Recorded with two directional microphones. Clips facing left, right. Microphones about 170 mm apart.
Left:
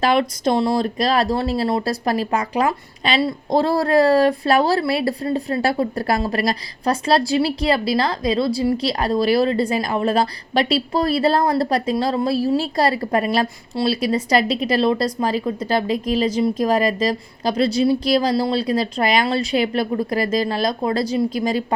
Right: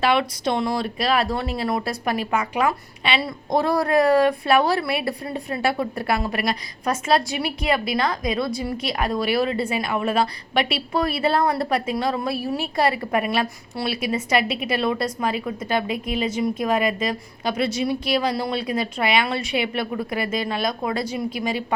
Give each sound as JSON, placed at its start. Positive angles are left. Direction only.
{"t": 0.0, "sound": "a woman's voice", "side_deg": 40}